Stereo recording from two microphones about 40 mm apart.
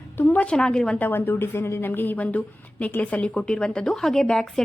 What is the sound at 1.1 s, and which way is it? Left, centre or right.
A woman's voice, left.